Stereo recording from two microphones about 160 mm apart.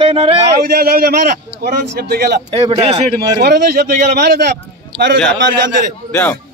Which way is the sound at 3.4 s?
85° right.